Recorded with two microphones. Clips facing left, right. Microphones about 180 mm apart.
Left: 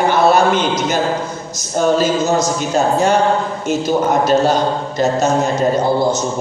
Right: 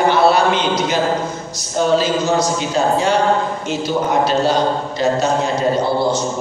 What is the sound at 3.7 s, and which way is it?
Speech, 45° left (ahead or behind).